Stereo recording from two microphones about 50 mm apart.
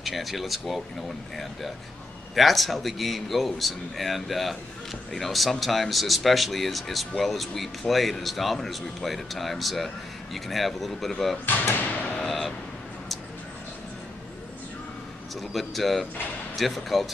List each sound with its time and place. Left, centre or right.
0.0 s speech: centre
2.3 s speech: centre
11.7 s speech: left
12.3 s vehicle: centre
15.5 s speech: centre